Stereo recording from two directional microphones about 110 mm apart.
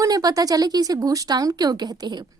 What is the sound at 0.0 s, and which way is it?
A woman's voice, 35° right (ahead or behind).